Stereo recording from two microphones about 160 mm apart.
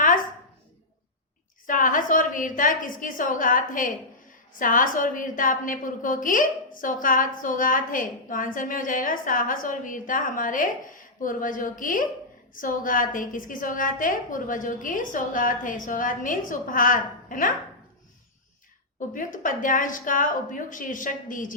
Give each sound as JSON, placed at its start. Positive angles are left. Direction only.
{"t": 1.6, "sound": "a woman's voice", "side_deg": 55}
{"t": 18.9, "sound": "a woman's voice", "side_deg": 55}